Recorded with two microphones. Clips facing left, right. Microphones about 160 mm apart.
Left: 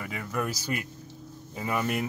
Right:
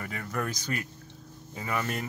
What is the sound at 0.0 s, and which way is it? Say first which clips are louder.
Speech: left 2 dB; 10° left (ahead or behind).